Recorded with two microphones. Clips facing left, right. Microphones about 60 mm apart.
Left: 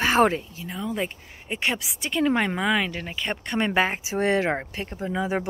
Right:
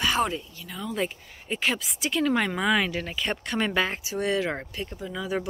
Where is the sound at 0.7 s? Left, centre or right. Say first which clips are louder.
Left 1 dB; centre.